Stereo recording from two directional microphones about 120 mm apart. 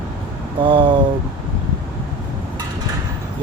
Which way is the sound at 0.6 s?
45° right (ahead or behind).